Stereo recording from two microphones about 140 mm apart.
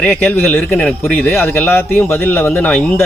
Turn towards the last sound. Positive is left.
turn(degrees=10)  # may be behind; listen again after turning